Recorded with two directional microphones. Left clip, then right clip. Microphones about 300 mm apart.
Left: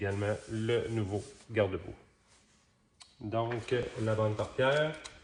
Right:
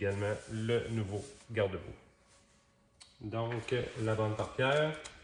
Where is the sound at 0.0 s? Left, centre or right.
Centre.